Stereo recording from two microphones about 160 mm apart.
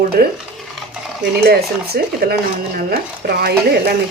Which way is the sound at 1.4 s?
75° right (ahead or behind).